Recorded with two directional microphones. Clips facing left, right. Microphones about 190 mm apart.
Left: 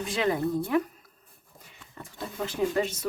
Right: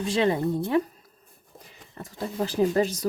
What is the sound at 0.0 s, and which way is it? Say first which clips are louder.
Speech: right 3 dB; 30° right (ahead or behind).